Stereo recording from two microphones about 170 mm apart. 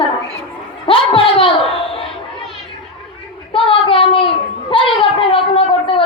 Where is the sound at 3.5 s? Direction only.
30° left (ahead or behind).